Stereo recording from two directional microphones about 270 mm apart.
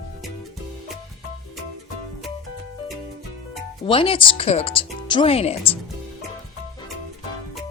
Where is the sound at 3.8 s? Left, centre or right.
Centre.